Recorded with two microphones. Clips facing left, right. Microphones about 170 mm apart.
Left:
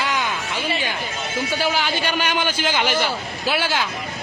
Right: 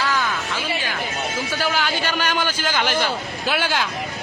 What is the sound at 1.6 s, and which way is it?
A man's voice, 10° left (ahead or behind).